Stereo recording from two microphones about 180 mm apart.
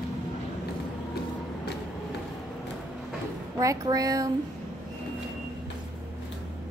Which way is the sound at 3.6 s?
20° right (ahead or behind).